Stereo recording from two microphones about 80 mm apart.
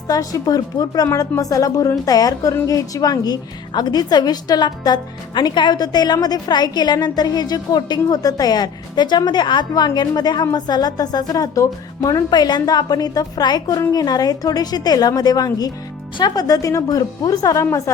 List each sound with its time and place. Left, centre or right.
0.1 s a woman's voice: left